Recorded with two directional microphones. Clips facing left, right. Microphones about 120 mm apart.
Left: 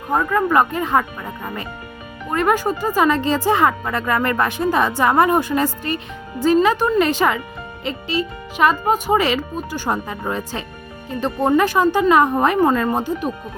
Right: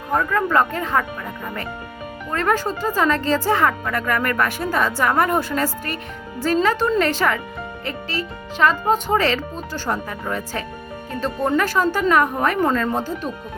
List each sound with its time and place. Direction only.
0.1 s speech: 15° left (ahead or behind)
2.3 s speech: 15° left (ahead or behind)